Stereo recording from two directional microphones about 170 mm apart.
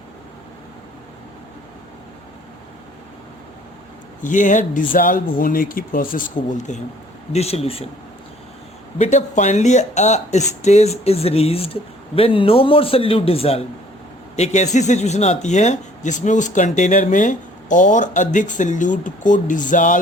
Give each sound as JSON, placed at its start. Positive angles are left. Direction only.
{"t": 4.2, "sound": "speech", "side_deg": 50}
{"t": 9.0, "sound": "speech", "side_deg": 45}